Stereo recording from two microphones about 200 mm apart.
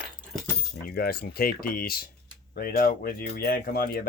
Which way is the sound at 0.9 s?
50° left (ahead or behind).